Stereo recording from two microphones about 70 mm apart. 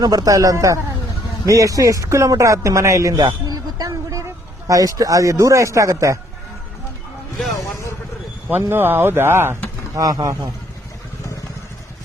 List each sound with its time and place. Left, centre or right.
0.0 s a man's voice: right
7.5 s vehicle: left
8.4 s speech: right
9.9 s speech: right